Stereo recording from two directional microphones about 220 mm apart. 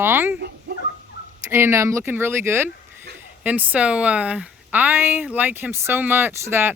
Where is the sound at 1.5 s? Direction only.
10° right (ahead or behind).